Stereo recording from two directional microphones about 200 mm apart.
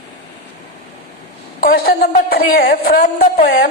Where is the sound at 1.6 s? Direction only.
50° left (ahead or behind).